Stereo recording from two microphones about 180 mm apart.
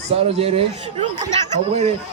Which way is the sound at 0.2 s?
35° right (ahead or behind).